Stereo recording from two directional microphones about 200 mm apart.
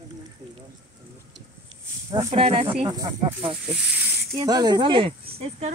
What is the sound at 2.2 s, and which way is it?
Speech, 30° right (ahead or behind).